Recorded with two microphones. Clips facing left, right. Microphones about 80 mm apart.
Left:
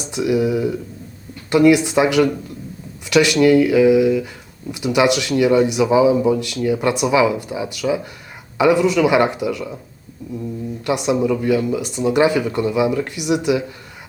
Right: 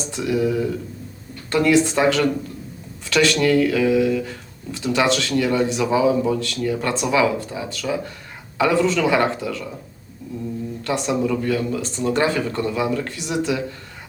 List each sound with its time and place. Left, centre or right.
0.0 s speech: centre
10.8 s speech: centre